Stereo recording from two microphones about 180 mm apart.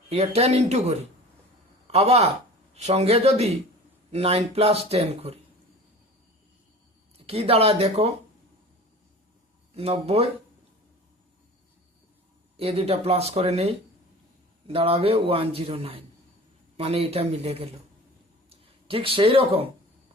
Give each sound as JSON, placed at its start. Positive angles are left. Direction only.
{"t": 0.1, "sound": "a man's voice", "side_deg": -35}
{"t": 7.2, "sound": "a man's voice", "side_deg": -35}
{"t": 9.7, "sound": "a man's voice", "side_deg": -35}
{"t": 12.5, "sound": "a man's voice", "side_deg": -35}